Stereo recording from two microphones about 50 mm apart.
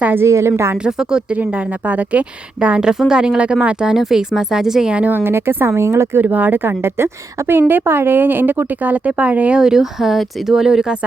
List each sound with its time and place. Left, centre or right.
0.3 s speech: right
0.9 s speech: centre
1.3 s a woman's voice: right
2.8 s speech: centre
3.9 s speech: centre
5.0 s speech: right
6.2 s a woman's voice: right
6.8 s a woman's voice: right
9.6 s speech: centre